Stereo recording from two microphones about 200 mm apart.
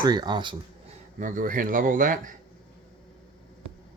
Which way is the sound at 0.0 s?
20° right (ahead or behind).